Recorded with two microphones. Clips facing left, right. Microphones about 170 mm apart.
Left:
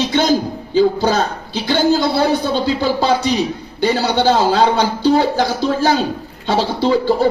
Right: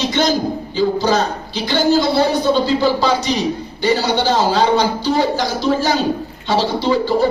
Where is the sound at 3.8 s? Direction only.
55° left (ahead or behind).